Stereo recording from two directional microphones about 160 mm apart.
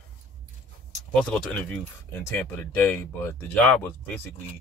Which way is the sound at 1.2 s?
5° left (ahead or behind).